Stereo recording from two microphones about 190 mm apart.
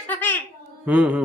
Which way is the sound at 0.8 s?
5° right (ahead or behind).